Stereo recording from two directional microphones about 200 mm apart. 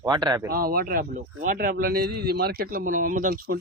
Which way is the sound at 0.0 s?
20° right (ahead or behind).